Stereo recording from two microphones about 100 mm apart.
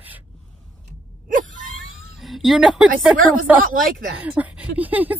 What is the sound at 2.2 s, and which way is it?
Speech, centre (ahead or behind).